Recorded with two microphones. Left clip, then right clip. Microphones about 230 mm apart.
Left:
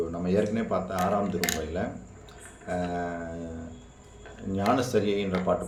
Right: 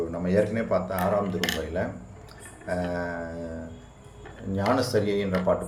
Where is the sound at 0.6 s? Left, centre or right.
Centre.